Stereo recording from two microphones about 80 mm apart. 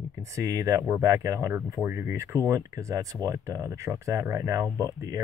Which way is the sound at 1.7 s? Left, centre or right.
Right.